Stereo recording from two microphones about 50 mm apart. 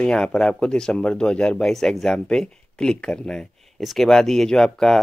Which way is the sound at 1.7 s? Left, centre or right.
Centre.